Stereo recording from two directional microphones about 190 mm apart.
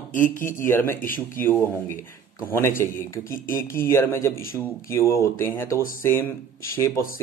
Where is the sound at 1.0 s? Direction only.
45° left (ahead or behind).